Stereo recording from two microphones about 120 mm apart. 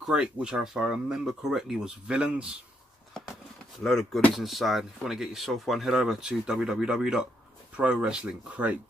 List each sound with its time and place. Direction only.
0.0 s speech: 5° right (ahead or behind)
3.8 s speech: 5° left (ahead or behind)